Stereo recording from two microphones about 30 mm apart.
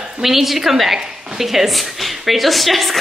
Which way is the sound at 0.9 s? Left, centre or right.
Centre.